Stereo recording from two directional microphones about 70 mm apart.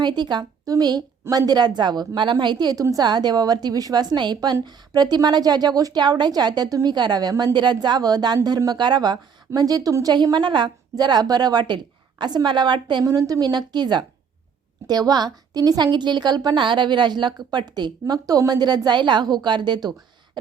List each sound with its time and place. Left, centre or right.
0.0 s a woman's voice: right
0.6 s a woman's voice: right
1.3 s a woman's voice: right
9.6 s a woman's voice: right
10.3 s a woman's voice: right
13.1 s a woman's voice: right
14.8 s a woman's voice: right
18.0 s a woman's voice: right